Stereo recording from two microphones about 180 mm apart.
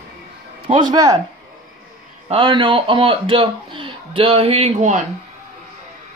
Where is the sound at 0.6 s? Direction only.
25° right (ahead or behind).